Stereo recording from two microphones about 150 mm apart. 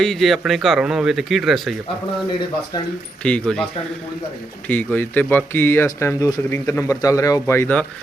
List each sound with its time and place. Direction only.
0.0 s a man's voice: centre (ahead or behind)
3.2 s speech: 5° left (ahead or behind)
4.7 s speech: 10° left (ahead or behind)